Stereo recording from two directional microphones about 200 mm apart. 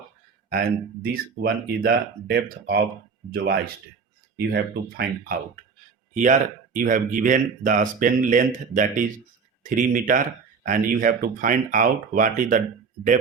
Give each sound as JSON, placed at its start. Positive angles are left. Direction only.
{"t": 1.1, "sound": "speech", "side_deg": -50}